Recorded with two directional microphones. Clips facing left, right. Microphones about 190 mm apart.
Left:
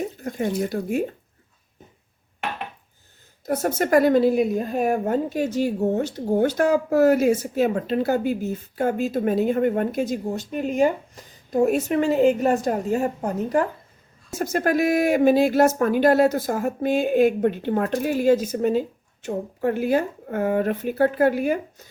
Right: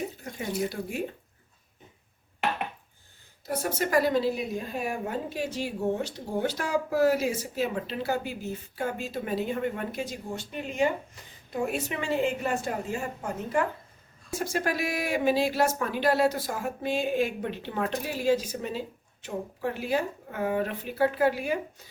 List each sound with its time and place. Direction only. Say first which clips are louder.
0.3 s speech: left 7 dB; 45° left (ahead or behind)
3.4 s speech: left 6 dB; 45° left (ahead or behind)